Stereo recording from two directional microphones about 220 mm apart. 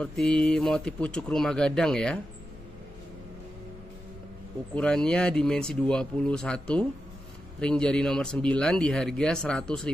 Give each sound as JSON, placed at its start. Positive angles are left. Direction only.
{"t": 0.0, "sound": "speech", "side_deg": 5}
{"t": 4.7, "sound": "speech", "side_deg": 5}